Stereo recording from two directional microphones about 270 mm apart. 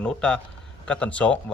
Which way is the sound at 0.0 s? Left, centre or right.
Centre.